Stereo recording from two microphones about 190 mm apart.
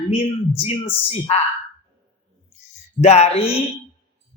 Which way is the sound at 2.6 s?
35° left (ahead or behind).